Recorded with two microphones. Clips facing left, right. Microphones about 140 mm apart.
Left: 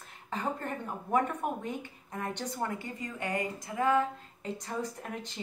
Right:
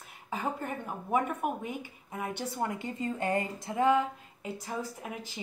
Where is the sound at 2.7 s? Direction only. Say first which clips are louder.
Right 4 dB; 25° right (ahead or behind).